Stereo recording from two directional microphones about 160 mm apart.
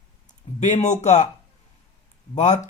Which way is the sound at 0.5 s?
45° left (ahead or behind).